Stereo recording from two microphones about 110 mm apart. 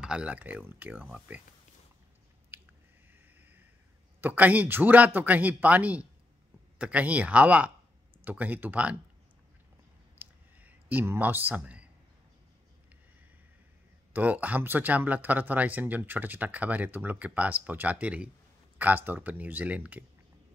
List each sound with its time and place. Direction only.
0.0 s speech: 10° right (ahead or behind)
2.5 s squish: 20° right (ahead or behind)
3.1 s a sound: 15° right (ahead or behind)
4.2 s speech: 15° right (ahead or behind)
10.1 s a sound: 15° right (ahead or behind)
14.1 s speech: 15° right (ahead or behind)